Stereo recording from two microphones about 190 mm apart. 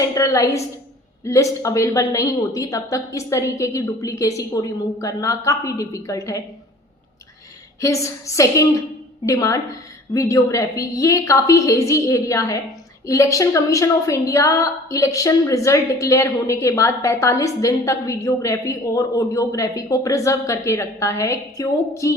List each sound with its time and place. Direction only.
0.0 s a woman's voice: 15° left (ahead or behind)
7.8 s a woman's voice: 15° left (ahead or behind)